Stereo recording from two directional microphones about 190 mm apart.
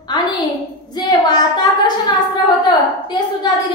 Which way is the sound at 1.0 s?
20° left (ahead or behind).